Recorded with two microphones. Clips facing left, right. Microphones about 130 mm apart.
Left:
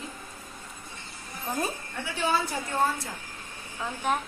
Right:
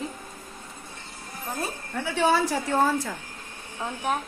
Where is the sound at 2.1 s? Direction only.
90° right.